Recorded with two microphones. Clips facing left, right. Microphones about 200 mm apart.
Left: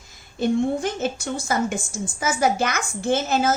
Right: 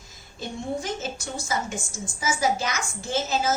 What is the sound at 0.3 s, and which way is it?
A woman's voice, 60° left (ahead or behind).